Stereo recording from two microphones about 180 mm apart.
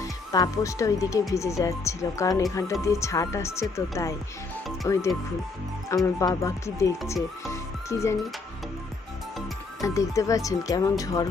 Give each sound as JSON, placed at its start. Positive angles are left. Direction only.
{"t": 0.0, "sound": "speech", "side_deg": 20}
{"t": 6.1, "sound": "speech", "side_deg": 15}
{"t": 9.8, "sound": "speech", "side_deg": 20}